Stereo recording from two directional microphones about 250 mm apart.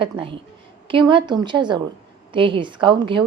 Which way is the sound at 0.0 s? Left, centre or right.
Centre.